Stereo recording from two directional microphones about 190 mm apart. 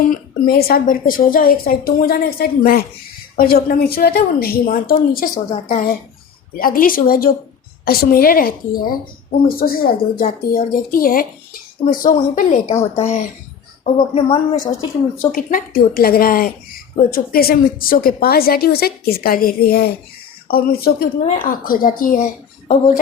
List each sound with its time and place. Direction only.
0.1 s a woman's voice: 50° left (ahead or behind); by 15.3 s 30° left (ahead or behind)
15.3 s a woman's voice: 50° left (ahead or behind)